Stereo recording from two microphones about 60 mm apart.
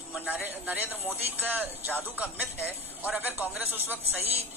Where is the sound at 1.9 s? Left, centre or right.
Right.